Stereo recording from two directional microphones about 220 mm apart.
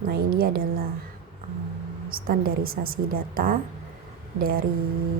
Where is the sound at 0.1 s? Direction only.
45° right (ahead or behind).